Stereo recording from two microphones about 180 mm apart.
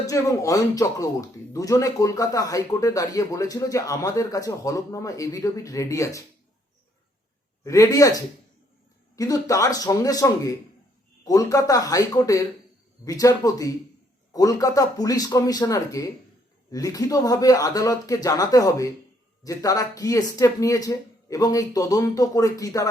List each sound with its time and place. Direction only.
0.0 s a man's voice: 20° left (ahead or behind)
7.6 s a man's voice: 15° left (ahead or behind)